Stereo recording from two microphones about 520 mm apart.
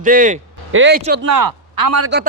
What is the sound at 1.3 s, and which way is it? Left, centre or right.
Speech, right.